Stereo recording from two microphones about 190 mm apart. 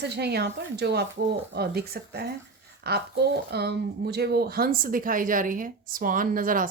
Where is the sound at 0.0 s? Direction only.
60° right (ahead or behind).